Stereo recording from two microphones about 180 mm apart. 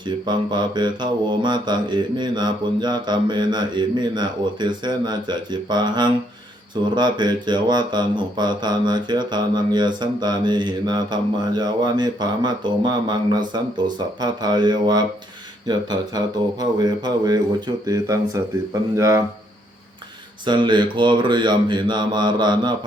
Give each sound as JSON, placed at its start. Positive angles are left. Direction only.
{"t": 0.3, "sound": "speech", "side_deg": -25}
{"t": 20.4, "sound": "speech", "side_deg": -25}